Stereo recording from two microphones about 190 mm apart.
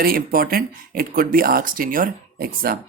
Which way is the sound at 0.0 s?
50° right (ahead or behind).